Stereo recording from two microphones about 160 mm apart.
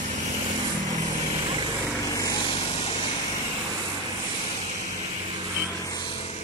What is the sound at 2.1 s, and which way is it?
Vehicle, 20° left (ahead or behind).